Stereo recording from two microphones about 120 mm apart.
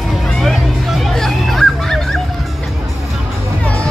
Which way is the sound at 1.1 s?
Centre (ahead or behind).